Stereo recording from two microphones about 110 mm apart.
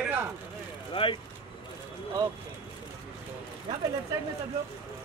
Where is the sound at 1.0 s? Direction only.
50° left (ahead or behind).